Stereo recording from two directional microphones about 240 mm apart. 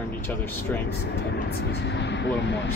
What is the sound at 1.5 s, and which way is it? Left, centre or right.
Speech, left.